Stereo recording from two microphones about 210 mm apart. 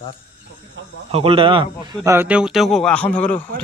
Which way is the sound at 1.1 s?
25° right (ahead or behind).